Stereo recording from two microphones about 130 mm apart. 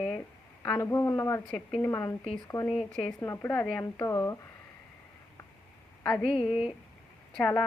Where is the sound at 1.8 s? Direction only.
20° left (ahead or behind).